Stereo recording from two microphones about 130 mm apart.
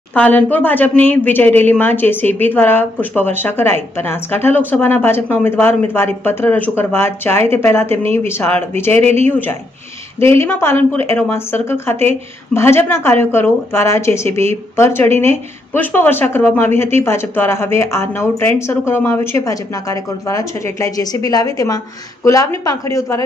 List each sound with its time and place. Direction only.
0.1 s a woman's voice: 10° left (ahead or behind)
10.2 s speech: 20° left (ahead or behind)